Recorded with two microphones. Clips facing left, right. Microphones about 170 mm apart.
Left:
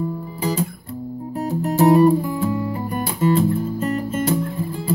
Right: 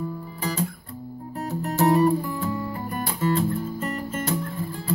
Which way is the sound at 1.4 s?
15° left (ahead or behind).